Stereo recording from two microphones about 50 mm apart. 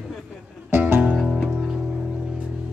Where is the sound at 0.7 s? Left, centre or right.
Right.